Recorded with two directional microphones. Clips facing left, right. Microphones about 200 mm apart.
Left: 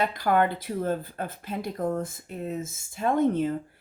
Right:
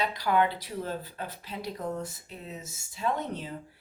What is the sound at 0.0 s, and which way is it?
Speech, 50° left (ahead or behind).